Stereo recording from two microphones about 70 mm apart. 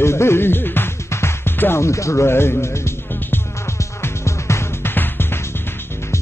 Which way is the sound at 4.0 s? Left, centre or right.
Left.